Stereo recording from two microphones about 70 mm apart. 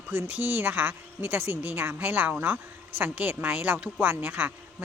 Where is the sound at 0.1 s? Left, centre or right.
Right.